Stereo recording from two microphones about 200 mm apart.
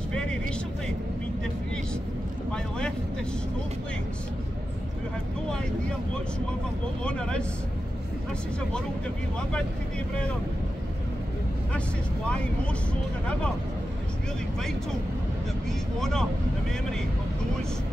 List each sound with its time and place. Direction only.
0.1 s vehicle: 5° left (ahead or behind)
7.0 s speech: 5° left (ahead or behind)
16.0 s speech: centre (ahead or behind)